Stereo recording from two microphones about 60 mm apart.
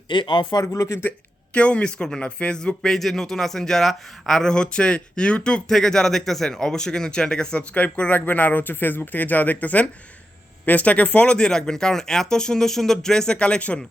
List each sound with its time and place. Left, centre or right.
0.6 s speech: left
1.5 s speech: centre